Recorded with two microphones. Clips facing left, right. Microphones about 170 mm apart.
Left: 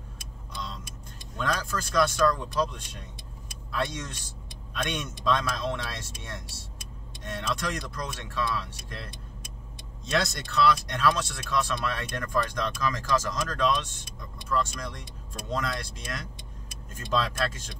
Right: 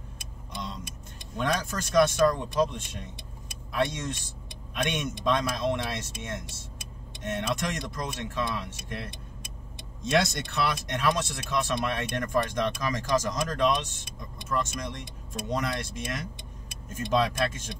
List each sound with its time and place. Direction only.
1.4 s speech: 20° right (ahead or behind)
10.1 s speech: 20° right (ahead or behind)